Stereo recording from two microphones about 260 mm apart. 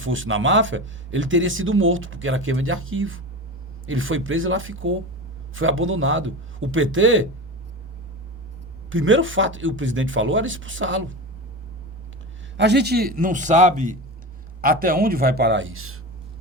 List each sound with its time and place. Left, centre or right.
0.0 s speech: right
8.9 s speech: right
12.5 s a man's voice: right